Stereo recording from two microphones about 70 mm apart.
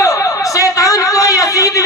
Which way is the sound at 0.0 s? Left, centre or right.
Left.